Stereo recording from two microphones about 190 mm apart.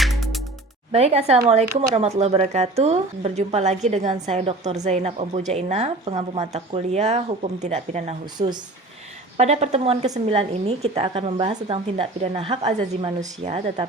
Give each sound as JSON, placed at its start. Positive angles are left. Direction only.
{"t": 0.0, "sound": "music", "side_deg": 0}
{"t": 0.9, "sound": "a woman's voice", "side_deg": -35}